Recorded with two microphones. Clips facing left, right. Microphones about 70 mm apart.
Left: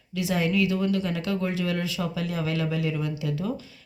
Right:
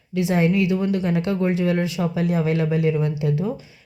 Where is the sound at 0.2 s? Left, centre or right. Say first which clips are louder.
Right 5 dB; right.